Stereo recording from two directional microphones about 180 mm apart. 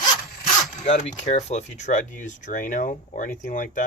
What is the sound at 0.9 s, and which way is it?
Speech, 40° left (ahead or behind).